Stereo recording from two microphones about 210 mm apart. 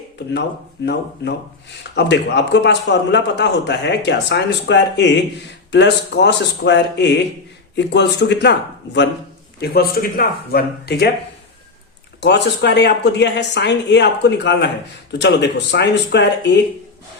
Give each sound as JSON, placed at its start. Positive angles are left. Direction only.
{"t": 0.9, "sound": "a man's voice", "side_deg": 55}
{"t": 12.2, "sound": "a man's voice", "side_deg": 55}